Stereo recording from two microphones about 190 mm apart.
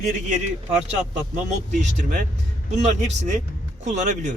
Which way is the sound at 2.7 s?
40° right (ahead or behind).